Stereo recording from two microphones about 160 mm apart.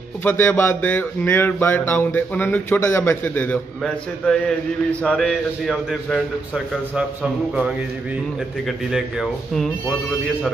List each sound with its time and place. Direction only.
0.2 s a man's voice: 10° left (ahead or behind)
8.6 s a man's voice: centre (ahead or behind)